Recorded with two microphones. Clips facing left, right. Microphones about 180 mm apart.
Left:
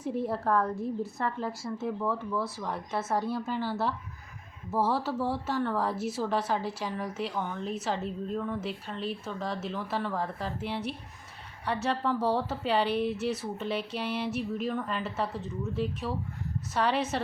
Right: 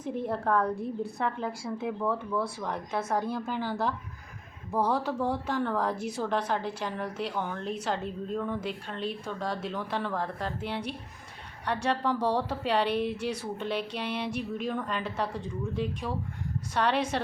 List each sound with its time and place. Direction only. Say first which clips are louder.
0.0 s speech: even; 5° left (ahead or behind)